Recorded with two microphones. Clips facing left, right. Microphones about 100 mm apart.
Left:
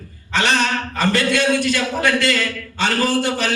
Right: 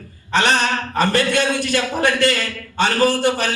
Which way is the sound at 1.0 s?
50° right (ahead or behind).